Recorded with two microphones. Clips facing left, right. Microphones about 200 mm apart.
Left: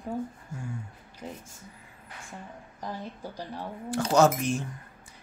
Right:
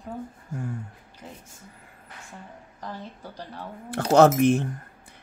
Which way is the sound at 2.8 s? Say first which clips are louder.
Left 1 dB; 10° left (ahead or behind).